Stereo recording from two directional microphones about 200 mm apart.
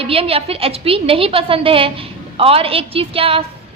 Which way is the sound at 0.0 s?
30° right (ahead or behind).